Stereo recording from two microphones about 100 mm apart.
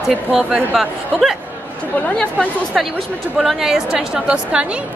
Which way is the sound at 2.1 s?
5° left (ahead or behind).